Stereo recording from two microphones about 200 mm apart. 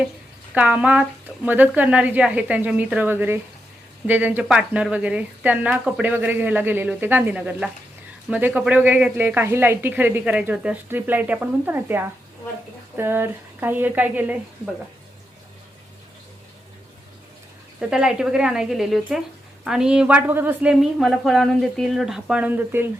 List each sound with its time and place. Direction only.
0.5 s speech: 5° right (ahead or behind)
17.7 s a woman's voice: 5° right (ahead or behind)